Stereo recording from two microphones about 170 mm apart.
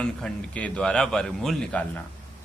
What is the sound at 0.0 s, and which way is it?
A man's voice, 5° left (ahead or behind).